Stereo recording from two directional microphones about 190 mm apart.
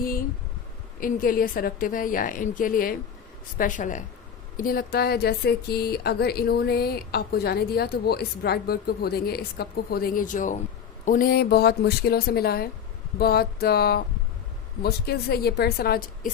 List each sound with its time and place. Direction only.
0.9 s a woman's voice: 50° left (ahead or behind)